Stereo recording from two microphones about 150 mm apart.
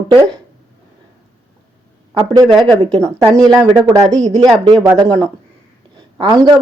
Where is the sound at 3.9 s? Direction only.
25° right (ahead or behind).